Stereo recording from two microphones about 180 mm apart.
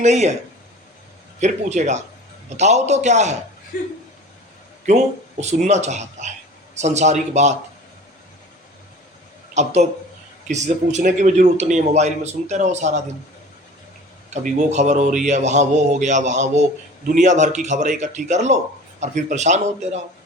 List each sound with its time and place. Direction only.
0.0 s a man's voice: 40° right (ahead or behind)
1.4 s a man's voice: 40° right (ahead or behind)
4.9 s a man's voice: 40° right (ahead or behind)
9.6 s a man's voice: 40° right (ahead or behind)
14.3 s a man's voice: 40° right (ahead or behind)